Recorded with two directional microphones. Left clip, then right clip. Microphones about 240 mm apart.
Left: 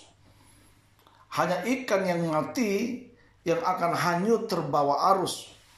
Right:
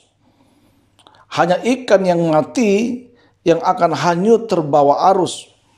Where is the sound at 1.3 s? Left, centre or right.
Right.